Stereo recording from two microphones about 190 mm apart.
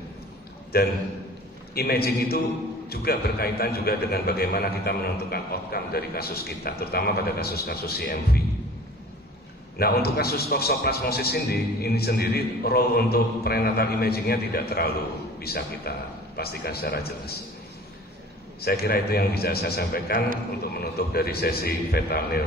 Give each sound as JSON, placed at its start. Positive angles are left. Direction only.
{"t": 0.7, "sound": "a man's voice", "side_deg": 55}
{"t": 9.8, "sound": "a man's voice", "side_deg": 55}
{"t": 18.6, "sound": "a man's voice", "side_deg": 55}